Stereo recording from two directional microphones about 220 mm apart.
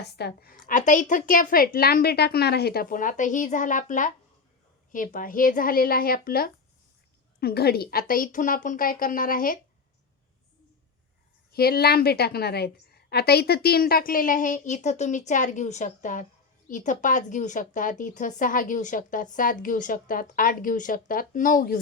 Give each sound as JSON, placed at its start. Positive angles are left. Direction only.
{"t": 0.2, "sound": "a woman's voice", "side_deg": 45}
{"t": 11.5, "sound": "a woman's voice", "side_deg": 45}